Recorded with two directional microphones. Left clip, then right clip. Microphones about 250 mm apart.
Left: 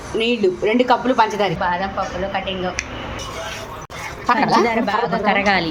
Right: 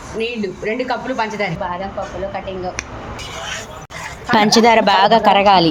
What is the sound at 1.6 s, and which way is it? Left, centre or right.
Speech, centre.